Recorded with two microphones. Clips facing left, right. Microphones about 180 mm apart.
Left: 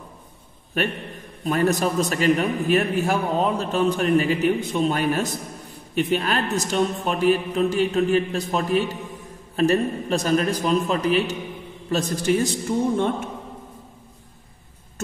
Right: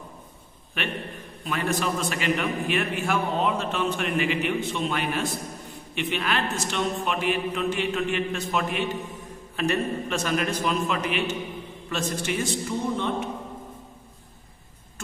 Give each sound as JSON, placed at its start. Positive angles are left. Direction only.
{"t": 0.8, "sound": "a man's voice", "side_deg": 40}